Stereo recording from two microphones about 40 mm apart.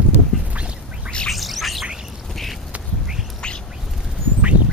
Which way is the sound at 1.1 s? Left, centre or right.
Left.